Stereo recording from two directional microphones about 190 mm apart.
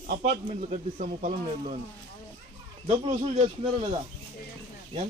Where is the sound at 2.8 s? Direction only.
30° right (ahead or behind).